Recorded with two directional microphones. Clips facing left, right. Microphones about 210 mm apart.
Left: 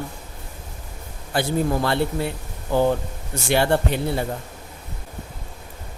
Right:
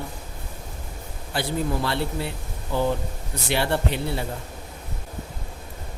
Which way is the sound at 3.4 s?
50° left (ahead or behind).